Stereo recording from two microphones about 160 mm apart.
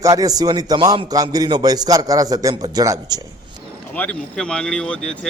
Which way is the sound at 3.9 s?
10° left (ahead or behind).